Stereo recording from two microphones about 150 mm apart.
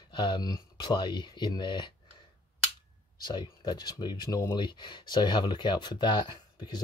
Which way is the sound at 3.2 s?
30° left (ahead or behind).